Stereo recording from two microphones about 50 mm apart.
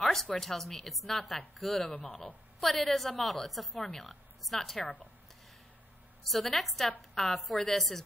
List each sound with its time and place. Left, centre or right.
0.0 s a sound: centre
0.3 s a woman's voice: centre
2.0 s speech: left
2.6 s a woman's voice: centre
6.2 s a woman's voice: centre